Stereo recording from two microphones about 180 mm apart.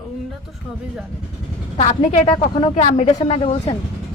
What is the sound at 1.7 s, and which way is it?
Speech, 40° left (ahead or behind).